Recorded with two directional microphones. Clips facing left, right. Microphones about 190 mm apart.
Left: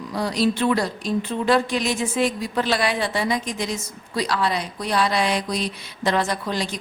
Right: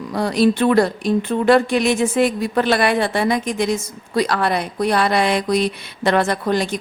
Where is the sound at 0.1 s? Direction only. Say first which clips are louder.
Right 5 dB; 55° right (ahead or behind).